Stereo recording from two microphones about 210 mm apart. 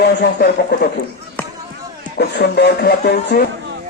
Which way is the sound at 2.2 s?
50° left (ahead or behind).